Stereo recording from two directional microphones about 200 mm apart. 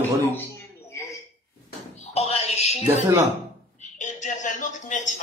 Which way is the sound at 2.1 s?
30° left (ahead or behind).